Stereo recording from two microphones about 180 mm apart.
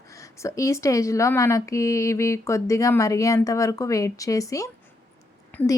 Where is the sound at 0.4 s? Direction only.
15° left (ahead or behind).